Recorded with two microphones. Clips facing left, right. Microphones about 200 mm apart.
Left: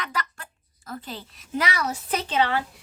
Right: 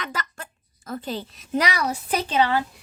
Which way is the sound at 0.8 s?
25° right (ahead or behind).